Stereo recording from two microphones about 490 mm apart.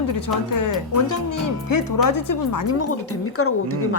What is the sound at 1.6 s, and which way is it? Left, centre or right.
Speech, left.